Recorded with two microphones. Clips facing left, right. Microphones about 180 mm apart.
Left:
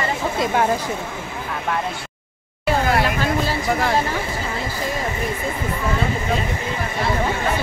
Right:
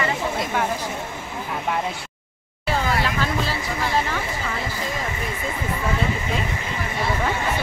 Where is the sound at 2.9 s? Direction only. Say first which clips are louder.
Left 4 dB; 50° left (ahead or behind).